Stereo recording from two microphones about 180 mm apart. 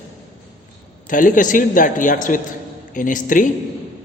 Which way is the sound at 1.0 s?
45° left (ahead or behind).